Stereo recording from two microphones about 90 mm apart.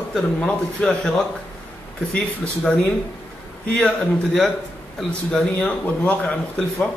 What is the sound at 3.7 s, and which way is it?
Speech, 10° left (ahead or behind).